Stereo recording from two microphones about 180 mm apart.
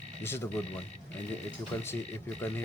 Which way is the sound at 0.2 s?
10° left (ahead or behind).